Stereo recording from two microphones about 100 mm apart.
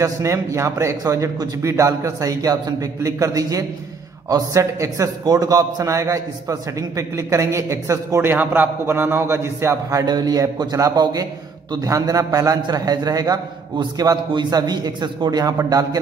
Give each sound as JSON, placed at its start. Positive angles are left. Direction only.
{"t": 0.0, "sound": "a man's voice", "side_deg": -30}